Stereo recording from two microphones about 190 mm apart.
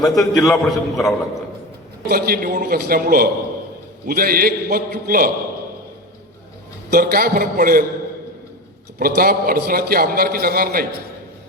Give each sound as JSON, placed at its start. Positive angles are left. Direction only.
{"t": 0.1, "sound": "a man's voice", "side_deg": 0}
{"t": 2.0, "sound": "a man's voice", "side_deg": -50}
{"t": 6.9, "sound": "a man's voice", "side_deg": -50}
{"t": 9.0, "sound": "a man's voice", "side_deg": -50}